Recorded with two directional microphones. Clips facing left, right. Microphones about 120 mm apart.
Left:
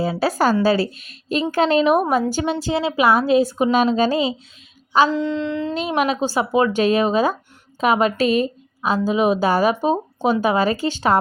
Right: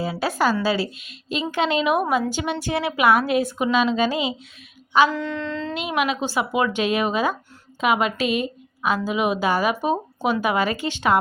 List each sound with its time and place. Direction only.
0.0 s a woman's voice: 35° left (ahead or behind)
2.5 s a woman's voice: 25° left (ahead or behind)
5.1 s a sound: 20° left (ahead or behind)
5.7 s a woman's voice: 35° left (ahead or behind)